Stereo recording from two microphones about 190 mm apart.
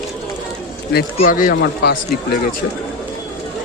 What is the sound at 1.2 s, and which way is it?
Speech, 45° left (ahead or behind).